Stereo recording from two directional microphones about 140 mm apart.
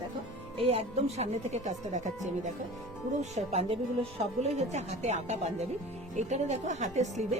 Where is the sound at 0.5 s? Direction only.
45° right (ahead or behind).